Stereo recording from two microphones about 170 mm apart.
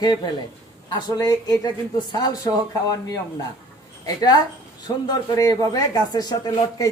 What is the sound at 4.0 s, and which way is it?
A woman's voice, 25° left (ahead or behind).